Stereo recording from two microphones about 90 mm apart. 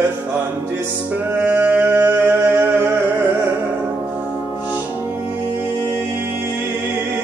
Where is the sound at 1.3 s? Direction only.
15° right (ahead or behind).